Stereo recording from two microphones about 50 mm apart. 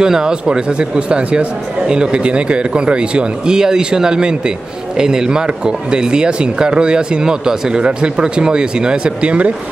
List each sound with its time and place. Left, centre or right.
0.0 s speech: centre